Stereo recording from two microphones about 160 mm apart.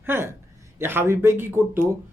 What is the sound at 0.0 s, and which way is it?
A man's voice, 15° right (ahead or behind).